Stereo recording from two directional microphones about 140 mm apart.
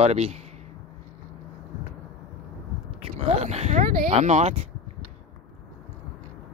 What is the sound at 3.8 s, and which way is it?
Speech, 90° right.